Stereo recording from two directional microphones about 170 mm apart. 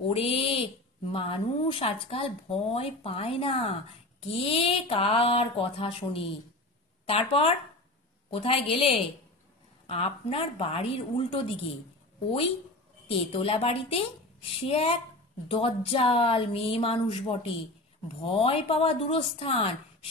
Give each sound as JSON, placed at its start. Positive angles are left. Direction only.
{"t": 0.0, "sound": "a sound", "side_deg": 35}
{"t": 1.1, "sound": "speech", "side_deg": 30}
{"t": 13.3, "sound": "speech", "side_deg": 35}